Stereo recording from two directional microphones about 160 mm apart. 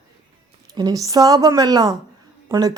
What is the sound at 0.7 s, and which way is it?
Speech, 25° right (ahead or behind).